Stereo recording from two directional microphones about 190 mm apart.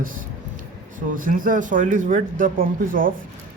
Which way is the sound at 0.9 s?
45° right (ahead or behind).